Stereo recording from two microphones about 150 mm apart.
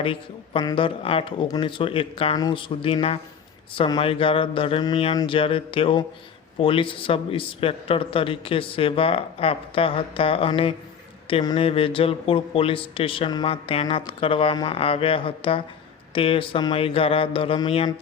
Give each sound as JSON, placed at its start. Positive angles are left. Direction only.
{"t": 0.0, "sound": "a man's voice", "side_deg": 35}